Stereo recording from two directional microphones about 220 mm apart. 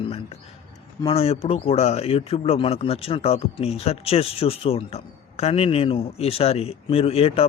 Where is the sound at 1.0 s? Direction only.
25° left (ahead or behind).